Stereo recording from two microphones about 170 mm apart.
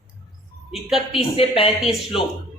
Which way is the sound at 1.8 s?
Centre (ahead or behind).